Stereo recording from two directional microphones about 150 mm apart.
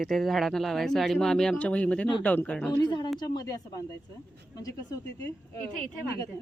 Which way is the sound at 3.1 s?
25° left (ahead or behind).